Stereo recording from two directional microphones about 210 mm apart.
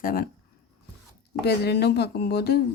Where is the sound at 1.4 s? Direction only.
50° left (ahead or behind).